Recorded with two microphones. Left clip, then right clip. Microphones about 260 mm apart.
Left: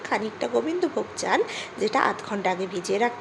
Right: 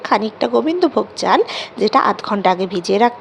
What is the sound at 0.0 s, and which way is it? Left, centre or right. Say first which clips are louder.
A woman's voice: right 10 dB; right.